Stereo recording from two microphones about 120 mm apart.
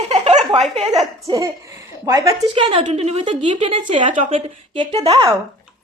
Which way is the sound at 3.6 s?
45° right (ahead or behind).